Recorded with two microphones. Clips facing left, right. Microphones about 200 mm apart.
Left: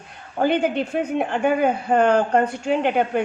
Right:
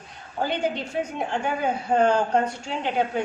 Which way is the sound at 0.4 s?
60° left (ahead or behind).